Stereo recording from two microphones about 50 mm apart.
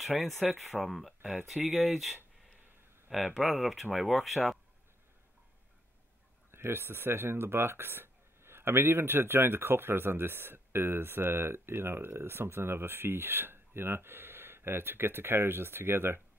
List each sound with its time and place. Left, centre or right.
0.2 s speech: centre
3.3 s speech: centre
6.5 s speech: right